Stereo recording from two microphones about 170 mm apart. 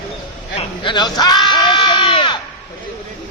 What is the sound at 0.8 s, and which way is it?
Sheep, 25° left (ahead or behind).